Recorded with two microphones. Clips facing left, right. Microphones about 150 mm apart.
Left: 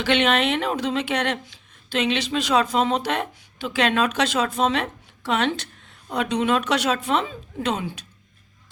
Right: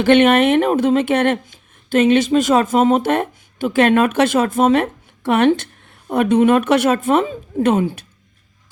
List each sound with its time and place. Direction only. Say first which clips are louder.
0.0 s speech: right 9 dB; 50° right (ahead or behind)